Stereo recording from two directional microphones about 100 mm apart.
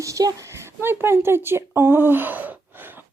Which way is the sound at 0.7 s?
25° right (ahead or behind).